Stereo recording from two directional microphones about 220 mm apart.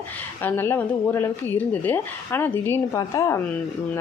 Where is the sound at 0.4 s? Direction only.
10° left (ahead or behind).